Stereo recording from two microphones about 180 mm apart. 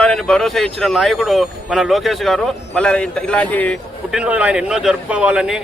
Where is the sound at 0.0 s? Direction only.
5° left (ahead or behind).